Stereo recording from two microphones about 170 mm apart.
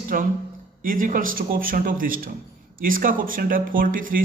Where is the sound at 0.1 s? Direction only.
55° right (ahead or behind).